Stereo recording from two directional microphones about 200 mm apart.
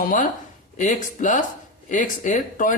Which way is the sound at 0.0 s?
40° left (ahead or behind).